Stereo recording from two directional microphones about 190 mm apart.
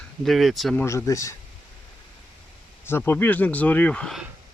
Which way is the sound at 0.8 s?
15° left (ahead or behind).